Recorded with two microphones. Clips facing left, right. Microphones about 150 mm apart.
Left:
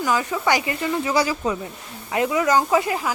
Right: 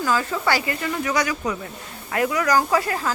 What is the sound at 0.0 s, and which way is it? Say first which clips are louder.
A woman's voice: left 1 dB; 15° left (ahead or behind).